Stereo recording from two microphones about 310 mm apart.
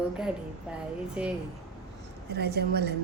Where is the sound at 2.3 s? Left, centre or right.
Right.